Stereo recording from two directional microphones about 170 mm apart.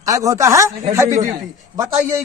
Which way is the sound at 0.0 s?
20° right (ahead or behind).